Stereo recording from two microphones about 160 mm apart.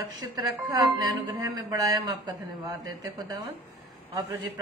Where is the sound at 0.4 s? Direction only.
25° right (ahead or behind).